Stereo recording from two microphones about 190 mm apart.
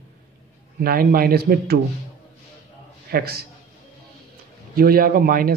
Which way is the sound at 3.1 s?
55° right (ahead or behind).